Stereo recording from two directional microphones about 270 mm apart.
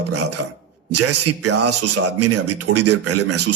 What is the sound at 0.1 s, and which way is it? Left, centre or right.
A man's voice, right.